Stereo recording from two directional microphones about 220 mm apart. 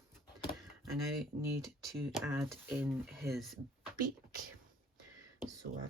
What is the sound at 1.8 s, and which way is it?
Speech, centre (ahead or behind).